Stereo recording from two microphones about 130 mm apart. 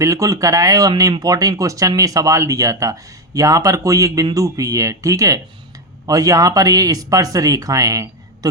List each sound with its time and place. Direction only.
0.0 s speech: 25° right (ahead or behind)